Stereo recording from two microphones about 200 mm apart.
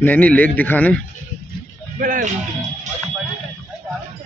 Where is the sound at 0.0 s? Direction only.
5° left (ahead or behind).